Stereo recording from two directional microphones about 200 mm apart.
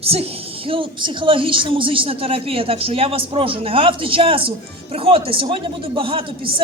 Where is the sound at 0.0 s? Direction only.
30° right (ahead or behind).